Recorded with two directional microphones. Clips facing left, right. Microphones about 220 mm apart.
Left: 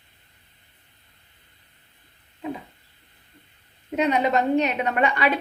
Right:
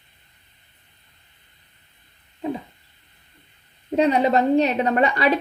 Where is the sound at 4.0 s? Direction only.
35° right (ahead or behind).